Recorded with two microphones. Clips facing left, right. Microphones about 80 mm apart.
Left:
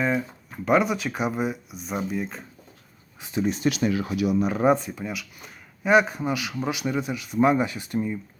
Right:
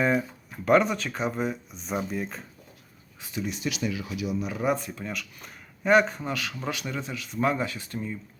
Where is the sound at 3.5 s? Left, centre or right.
Left.